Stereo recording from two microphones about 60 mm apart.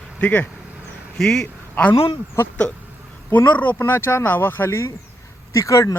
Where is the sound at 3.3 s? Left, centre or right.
Left.